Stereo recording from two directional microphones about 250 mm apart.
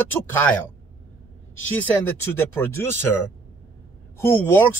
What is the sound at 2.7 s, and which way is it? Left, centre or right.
Speech, centre.